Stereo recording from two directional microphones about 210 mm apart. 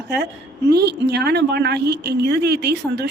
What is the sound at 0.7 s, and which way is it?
A woman's voice, 50° right (ahead or behind).